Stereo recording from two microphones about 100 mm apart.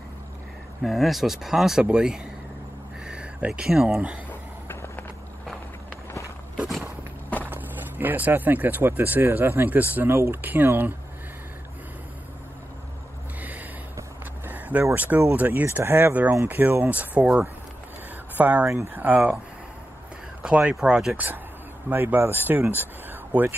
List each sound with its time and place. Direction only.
0.8 s speech: centre (ahead or behind)
4.3 s a sound: 20° left (ahead or behind)
6.5 s walk: 5° right (ahead or behind)
7.4 s speech: 20° right (ahead or behind)
13.4 s a sound: 15° right (ahead or behind)
15.0 s speech: 15° right (ahead or behind)
18.7 s speech: 30° right (ahead or behind)
19.0 s speech: 15° right (ahead or behind)
20.4 s speech: 10° right (ahead or behind)
21.8 s speech: 20° right (ahead or behind)